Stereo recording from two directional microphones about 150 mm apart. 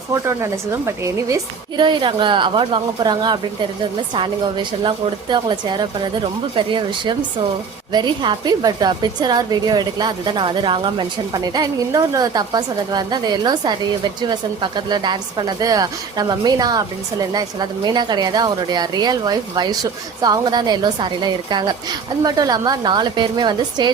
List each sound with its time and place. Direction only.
0.1 s a woman's voice: 20° right (ahead or behind)
1.7 s a woman's voice: 30° right (ahead or behind)